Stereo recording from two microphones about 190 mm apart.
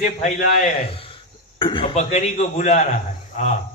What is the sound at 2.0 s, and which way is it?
Speech, 35° left (ahead or behind).